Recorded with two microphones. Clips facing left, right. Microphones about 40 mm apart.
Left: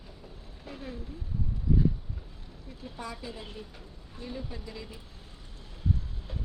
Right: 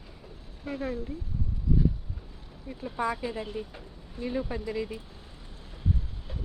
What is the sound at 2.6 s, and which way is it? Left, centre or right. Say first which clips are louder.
Speech: right 10 dB; right.